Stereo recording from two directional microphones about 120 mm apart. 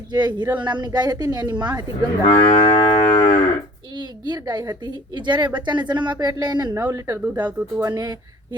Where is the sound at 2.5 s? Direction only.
50° left (ahead or behind).